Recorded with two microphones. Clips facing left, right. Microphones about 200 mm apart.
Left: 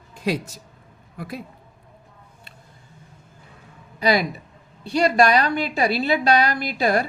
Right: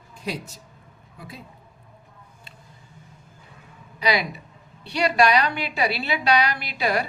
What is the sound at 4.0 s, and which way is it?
A woman's voice, 45° left (ahead or behind).